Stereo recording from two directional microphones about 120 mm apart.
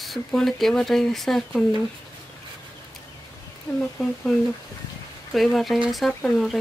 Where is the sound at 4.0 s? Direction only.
5° left (ahead or behind).